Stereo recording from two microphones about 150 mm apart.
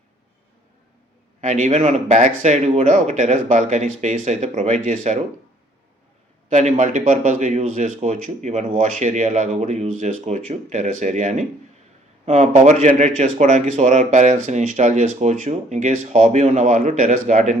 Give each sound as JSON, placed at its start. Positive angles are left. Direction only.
{"t": 1.4, "sound": "speech", "side_deg": -55}
{"t": 6.5, "sound": "speech", "side_deg": -50}